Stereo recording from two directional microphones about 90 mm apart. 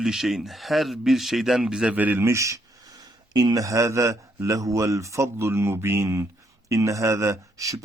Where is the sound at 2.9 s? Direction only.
50° right (ahead or behind).